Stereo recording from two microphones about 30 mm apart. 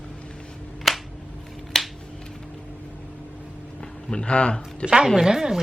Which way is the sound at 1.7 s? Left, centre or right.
Centre.